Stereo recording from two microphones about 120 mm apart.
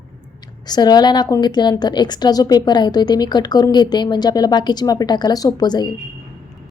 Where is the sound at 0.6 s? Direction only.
35° left (ahead or behind).